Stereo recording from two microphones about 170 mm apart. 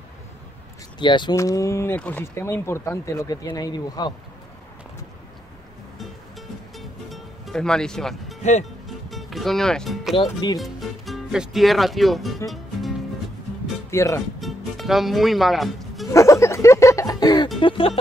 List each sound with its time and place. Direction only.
0.9 s speech: 25° left (ahead or behind)
6.8 s music: centre (ahead or behind)
8.4 s speech: 45° left (ahead or behind)
8.8 s music: centre (ahead or behind)
10.1 s speech: 30° left (ahead or behind)
10.6 s speech: centre (ahead or behind)
12.4 s music: centre (ahead or behind)
13.8 s speech: 15° left (ahead or behind)
14.4 s music: centre (ahead or behind)
16.1 s music: 20° left (ahead or behind)
17.6 s speech: 30° left (ahead or behind)